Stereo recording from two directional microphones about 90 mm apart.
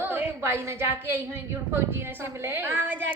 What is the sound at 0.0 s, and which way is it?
A woman's voice, 25° right (ahead or behind).